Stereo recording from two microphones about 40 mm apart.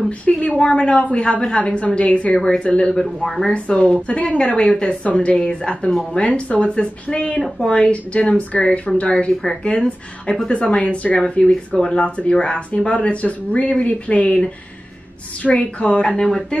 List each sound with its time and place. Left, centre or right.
0.2 s a woman's voice: left
3.0 s speech: centre
3.5 s a woman's voice: left
11.1 s speech: centre
15.4 s speech: left
16.2 s speech: centre